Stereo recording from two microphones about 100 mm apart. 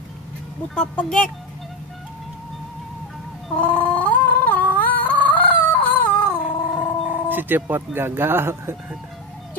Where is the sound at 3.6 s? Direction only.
15° left (ahead or behind).